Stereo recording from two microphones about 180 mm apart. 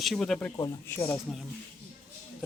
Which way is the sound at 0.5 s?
20° left (ahead or behind).